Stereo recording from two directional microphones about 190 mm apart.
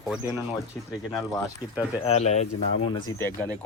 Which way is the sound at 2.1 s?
35° left (ahead or behind).